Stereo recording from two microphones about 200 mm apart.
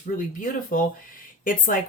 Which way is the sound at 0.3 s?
45° left (ahead or behind).